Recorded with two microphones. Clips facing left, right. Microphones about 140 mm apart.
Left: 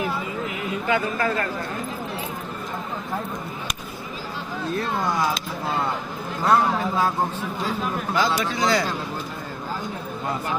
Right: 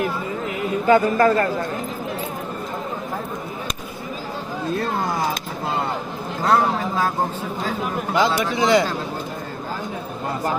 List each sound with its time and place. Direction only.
0.9 s a man's voice: 40° right (ahead or behind)
8.1 s speech: 20° right (ahead or behind)